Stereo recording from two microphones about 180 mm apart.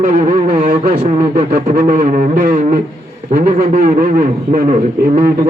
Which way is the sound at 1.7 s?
45° right (ahead or behind).